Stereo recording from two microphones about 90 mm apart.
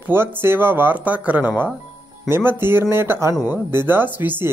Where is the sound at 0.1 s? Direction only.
25° right (ahead or behind).